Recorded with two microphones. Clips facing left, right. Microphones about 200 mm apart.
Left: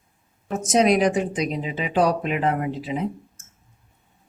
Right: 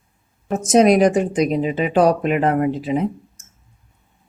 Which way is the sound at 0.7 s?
45° right (ahead or behind).